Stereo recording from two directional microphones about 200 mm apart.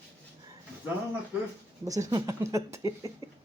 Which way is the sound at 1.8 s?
15° right (ahead or behind).